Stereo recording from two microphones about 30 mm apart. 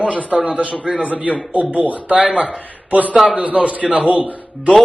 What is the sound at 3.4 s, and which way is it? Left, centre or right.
A man's voice, right.